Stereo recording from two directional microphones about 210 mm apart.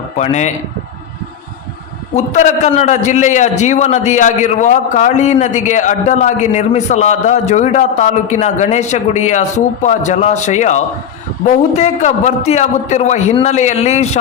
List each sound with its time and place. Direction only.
0.2 s a man's voice: 35° left (ahead or behind)
2.1 s a man's voice: 35° left (ahead or behind)